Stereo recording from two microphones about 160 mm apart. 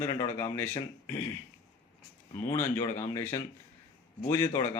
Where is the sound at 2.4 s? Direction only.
15° left (ahead or behind).